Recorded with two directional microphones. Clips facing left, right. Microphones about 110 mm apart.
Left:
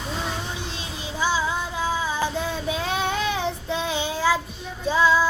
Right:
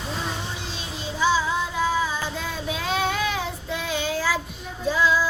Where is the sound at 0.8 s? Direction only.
15° left (ahead or behind).